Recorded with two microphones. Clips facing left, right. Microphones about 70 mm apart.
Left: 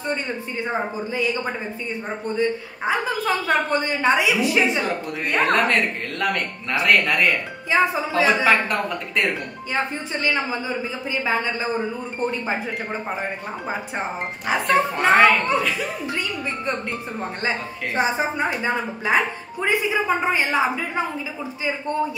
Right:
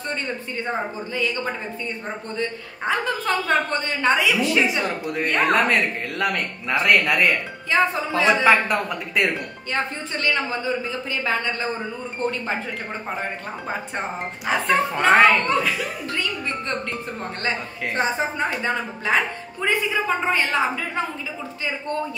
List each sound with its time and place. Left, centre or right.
0.1 s a man's voice: centre
5.0 s speech: centre
7.7 s a man's voice: centre
9.8 s a man's voice: centre
16.1 s a man's voice: centre